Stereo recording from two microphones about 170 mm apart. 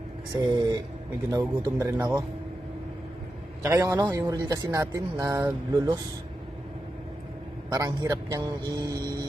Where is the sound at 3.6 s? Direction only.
20° right (ahead or behind).